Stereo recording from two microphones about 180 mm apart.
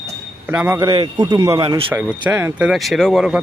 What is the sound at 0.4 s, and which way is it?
Speech, 10° right (ahead or behind).